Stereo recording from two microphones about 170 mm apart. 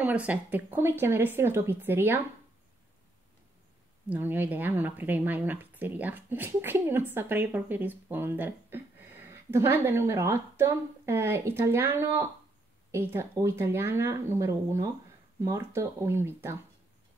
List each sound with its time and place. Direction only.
0.0 s a woman's voice: 10° right (ahead or behind)
4.1 s a woman's voice: 10° right (ahead or behind)